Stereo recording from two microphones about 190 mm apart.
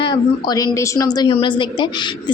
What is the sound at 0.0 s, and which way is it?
A woman's voice, 20° left (ahead or behind).